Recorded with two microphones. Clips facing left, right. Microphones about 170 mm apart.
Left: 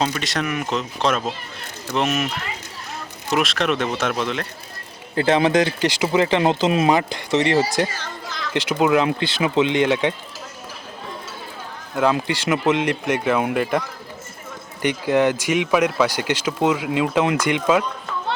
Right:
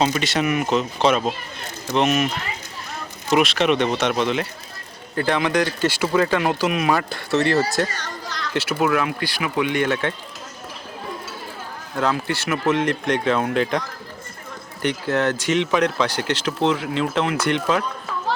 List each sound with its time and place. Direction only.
0.0 s speech: centre (ahead or behind)
5.2 s speech: 25° left (ahead or behind); by 8.4 s 5° left (ahead or behind)
8.5 s speech: 15° left (ahead or behind)
11.9 s speech: 15° left (ahead or behind)